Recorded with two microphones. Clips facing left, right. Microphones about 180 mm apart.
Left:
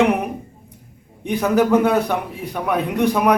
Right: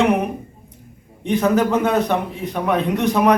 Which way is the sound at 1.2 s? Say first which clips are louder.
Even; 10° left (ahead or behind).